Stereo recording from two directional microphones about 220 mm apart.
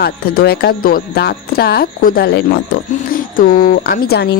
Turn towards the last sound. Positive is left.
turn(degrees=45)  # may be behind; listen again after turning